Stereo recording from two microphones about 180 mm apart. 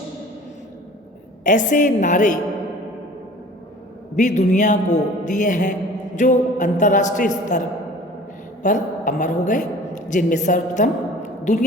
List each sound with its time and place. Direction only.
1.5 s a man's voice: 45° left (ahead or behind)
4.1 s a man's voice: 40° left (ahead or behind)
8.6 s a woman's voice: 45° left (ahead or behind)